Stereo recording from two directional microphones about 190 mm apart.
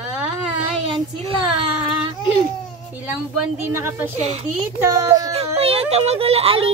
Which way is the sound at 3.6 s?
15° right (ahead or behind).